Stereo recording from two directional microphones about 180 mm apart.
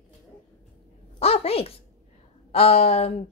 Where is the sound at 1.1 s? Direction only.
35° left (ahead or behind).